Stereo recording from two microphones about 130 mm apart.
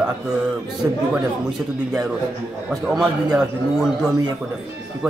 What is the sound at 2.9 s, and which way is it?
A man's voice, 5° right (ahead or behind).